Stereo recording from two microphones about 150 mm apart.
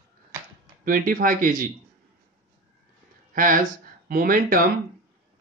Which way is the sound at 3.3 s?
65° right (ahead or behind).